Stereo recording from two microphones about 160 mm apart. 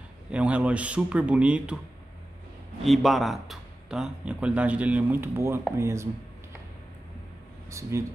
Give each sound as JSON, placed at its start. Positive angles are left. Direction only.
{"t": 0.3, "sound": "speech", "side_deg": -5}
{"t": 2.8, "sound": "speech", "side_deg": 0}
{"t": 7.9, "sound": "speech", "side_deg": -20}